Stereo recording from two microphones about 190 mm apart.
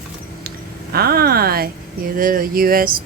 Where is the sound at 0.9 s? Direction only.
55° right (ahead or behind).